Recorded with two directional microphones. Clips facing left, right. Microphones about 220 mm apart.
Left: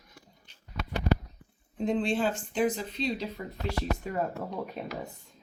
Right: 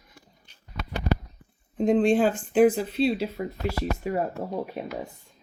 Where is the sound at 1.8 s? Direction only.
45° right (ahead or behind).